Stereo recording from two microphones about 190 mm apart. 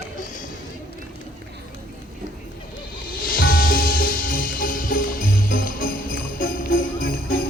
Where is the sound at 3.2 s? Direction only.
50° left (ahead or behind).